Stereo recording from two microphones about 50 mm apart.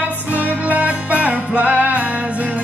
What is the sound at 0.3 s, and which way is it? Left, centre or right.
Music, right.